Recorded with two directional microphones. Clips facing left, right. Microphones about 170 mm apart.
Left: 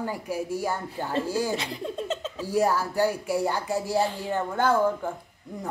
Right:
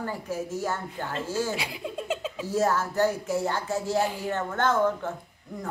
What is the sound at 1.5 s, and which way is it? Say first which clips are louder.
Speech: left 2 dB; 10° right (ahead or behind).